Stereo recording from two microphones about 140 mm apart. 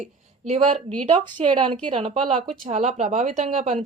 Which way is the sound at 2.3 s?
60° right (ahead or behind).